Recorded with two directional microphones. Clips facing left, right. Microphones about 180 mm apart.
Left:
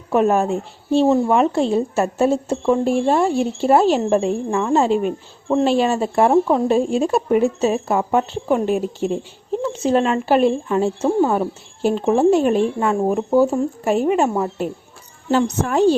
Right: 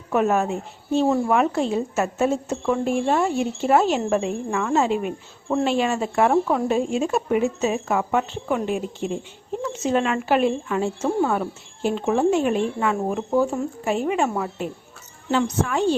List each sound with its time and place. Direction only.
0.1 s speech: 30° left (ahead or behind)
6.3 s speech: 20° left (ahead or behind)
6.7 s speech: 35° left (ahead or behind)